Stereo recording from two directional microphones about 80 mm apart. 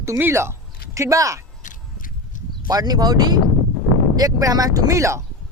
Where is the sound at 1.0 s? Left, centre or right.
Right.